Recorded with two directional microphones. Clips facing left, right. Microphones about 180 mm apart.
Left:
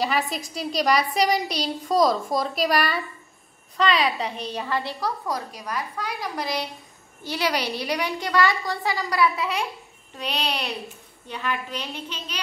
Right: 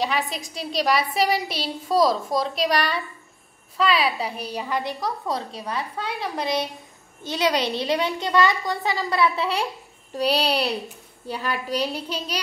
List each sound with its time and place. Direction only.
0.0 s a woman's voice: centre (ahead or behind); by 12.4 s 35° right (ahead or behind)